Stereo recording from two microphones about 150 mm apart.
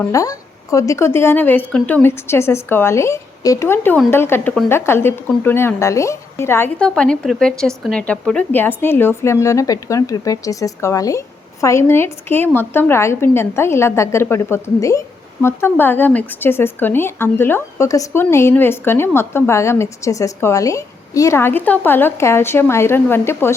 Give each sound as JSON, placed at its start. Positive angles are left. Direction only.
{"t": 0.1, "sound": "a woman's voice", "side_deg": 20}
{"t": 6.8, "sound": "a woman's voice", "side_deg": 5}